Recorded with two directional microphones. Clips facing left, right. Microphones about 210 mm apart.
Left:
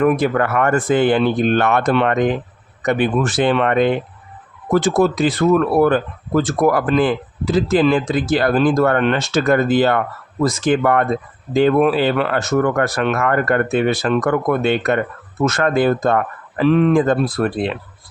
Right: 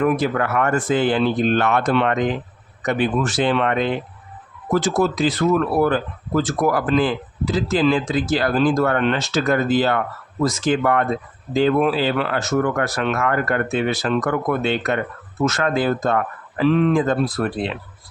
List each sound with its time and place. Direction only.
0.0 s speech: 55° left (ahead or behind)